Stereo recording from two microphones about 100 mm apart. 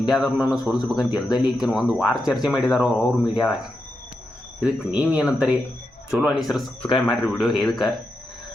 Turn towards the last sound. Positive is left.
turn(degrees=0)  # may be behind; listen again after turning